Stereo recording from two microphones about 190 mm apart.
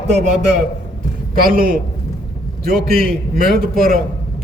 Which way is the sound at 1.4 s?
50° right (ahead or behind).